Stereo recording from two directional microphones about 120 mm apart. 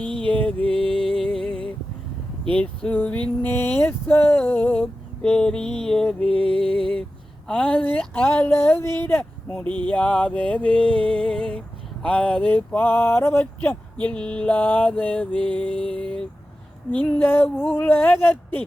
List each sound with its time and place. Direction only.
0.3 s music: 10° left (ahead or behind)
2.4 s speech: 10° left (ahead or behind)
6.5 s music: 5° left (ahead or behind)
7.4 s speech: 10° left (ahead or behind)